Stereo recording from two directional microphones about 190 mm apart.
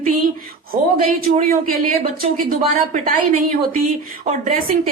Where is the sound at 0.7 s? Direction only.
45° right (ahead or behind).